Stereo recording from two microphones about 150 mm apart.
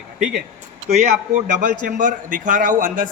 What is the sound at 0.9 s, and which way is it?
A man's voice, 50° right (ahead or behind).